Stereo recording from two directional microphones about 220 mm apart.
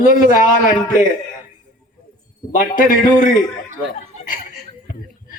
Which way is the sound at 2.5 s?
35° left (ahead or behind).